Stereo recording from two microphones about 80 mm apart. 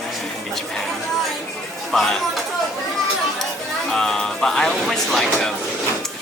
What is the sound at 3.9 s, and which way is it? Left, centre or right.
Speech, centre.